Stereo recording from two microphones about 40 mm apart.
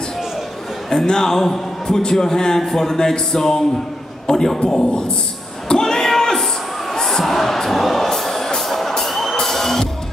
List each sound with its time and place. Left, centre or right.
0.8 s a man's voice: centre
5.7 s a sound: centre
8.5 s music: centre